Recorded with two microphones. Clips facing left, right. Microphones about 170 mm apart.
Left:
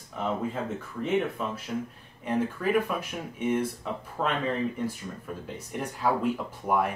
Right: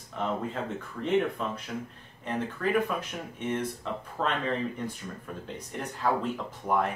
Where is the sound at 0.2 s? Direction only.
5° left (ahead or behind).